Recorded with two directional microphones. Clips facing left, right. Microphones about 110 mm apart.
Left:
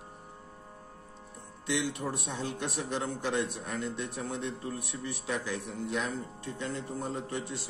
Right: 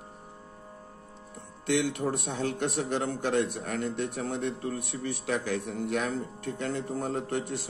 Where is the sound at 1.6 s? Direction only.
60° right (ahead or behind).